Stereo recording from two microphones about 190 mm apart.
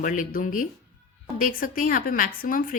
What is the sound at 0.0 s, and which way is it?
A woman's voice, 45° left (ahead or behind).